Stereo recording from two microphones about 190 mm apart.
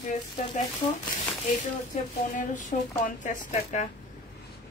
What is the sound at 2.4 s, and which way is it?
Speech, 40° left (ahead or behind).